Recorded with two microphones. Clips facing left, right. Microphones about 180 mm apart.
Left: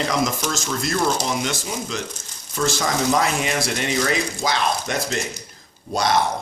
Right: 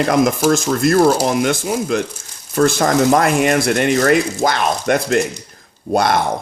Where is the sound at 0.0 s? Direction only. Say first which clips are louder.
Right 8 dB; 55° right (ahead or behind).